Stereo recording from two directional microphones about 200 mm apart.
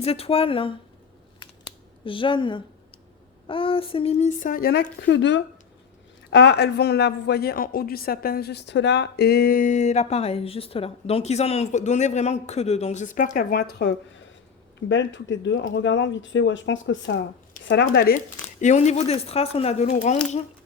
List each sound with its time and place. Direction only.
0.0 s a woman's voice: 30° left (ahead or behind)
2.0 s a woman's voice: 25° left (ahead or behind); by 13.9 s 55° left (ahead or behind)
14.8 s speech: 65° left (ahead or behind)
17.8 s speech: 45° left (ahead or behind)
18.6 s a woman's voice: 35° left (ahead or behind)
19.9 s speech: 45° left (ahead or behind)